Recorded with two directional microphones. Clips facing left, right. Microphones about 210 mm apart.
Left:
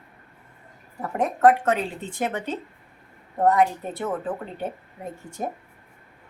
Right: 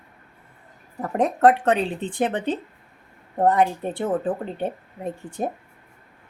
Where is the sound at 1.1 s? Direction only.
35° right (ahead or behind).